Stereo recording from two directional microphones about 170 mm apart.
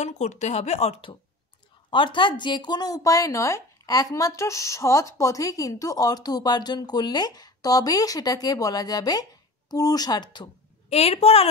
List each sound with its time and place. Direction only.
0.0 s a woman's voice: 45° left (ahead or behind)